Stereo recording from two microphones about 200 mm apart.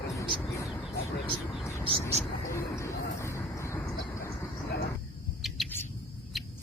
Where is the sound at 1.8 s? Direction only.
30° right (ahead or behind).